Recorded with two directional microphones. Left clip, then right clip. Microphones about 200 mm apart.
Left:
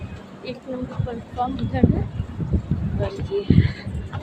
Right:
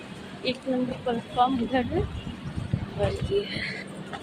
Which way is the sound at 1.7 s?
25° right (ahead or behind).